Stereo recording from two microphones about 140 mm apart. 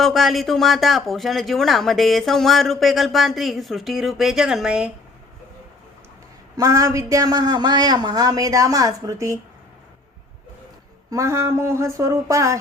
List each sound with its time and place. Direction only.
0.0 s speech: centre (ahead or behind)
6.6 s speech: 25° right (ahead or behind)
11.1 s speech: 20° right (ahead or behind)